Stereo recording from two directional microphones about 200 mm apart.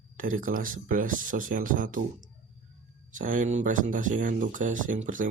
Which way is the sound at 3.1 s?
40° right (ahead or behind).